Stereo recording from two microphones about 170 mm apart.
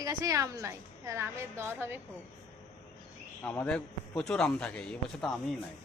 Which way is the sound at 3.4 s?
10° left (ahead or behind).